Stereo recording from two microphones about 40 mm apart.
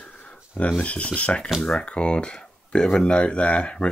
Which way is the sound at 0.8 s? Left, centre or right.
Left.